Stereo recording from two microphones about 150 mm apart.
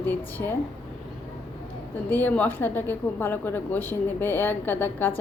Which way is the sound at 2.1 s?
10° left (ahead or behind).